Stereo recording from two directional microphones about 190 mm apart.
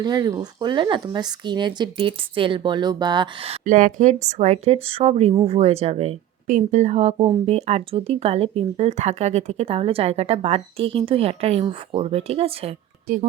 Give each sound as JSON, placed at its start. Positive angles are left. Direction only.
{"t": 0.0, "sound": "speech", "side_deg": -20}
{"t": 3.6, "sound": "speech", "side_deg": -45}